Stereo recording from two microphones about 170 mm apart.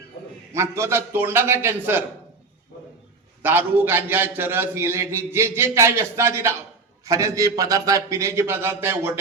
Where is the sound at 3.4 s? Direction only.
10° right (ahead or behind).